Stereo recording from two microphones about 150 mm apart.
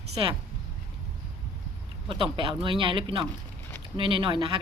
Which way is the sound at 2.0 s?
35° right (ahead or behind).